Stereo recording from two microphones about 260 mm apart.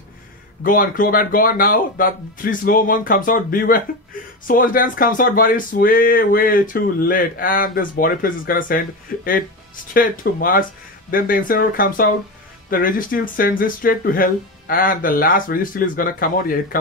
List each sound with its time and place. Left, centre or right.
0.7 s speech: left